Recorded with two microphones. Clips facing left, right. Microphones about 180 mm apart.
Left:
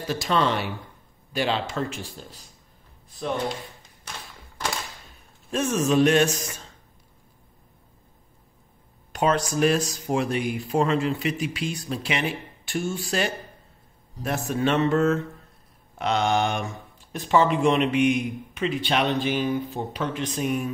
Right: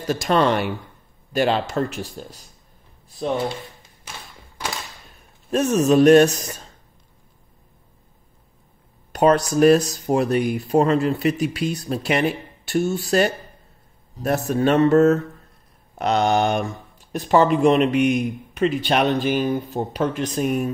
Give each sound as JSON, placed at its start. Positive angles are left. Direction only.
{"t": 0.0, "sound": "speech", "side_deg": -50}
{"t": 5.5, "sound": "speech", "side_deg": -40}
{"t": 9.1, "sound": "speech", "side_deg": -40}